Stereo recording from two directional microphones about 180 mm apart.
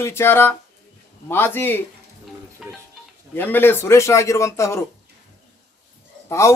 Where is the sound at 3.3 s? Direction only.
10° left (ahead or behind).